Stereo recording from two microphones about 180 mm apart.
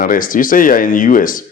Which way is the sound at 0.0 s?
50° left (ahead or behind).